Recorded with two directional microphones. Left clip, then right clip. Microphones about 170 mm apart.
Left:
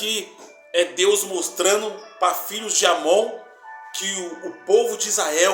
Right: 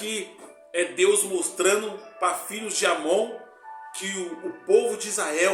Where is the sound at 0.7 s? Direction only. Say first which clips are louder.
Left 3 dB; 20° right (ahead or behind).